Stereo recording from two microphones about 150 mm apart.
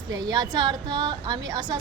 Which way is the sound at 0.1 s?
25° right (ahead or behind).